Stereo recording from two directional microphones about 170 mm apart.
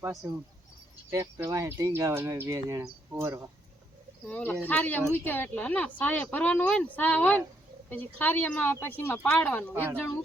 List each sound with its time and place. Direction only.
0.2 s speech: 15° right (ahead or behind)
4.3 s a woman's voice: 10° left (ahead or behind)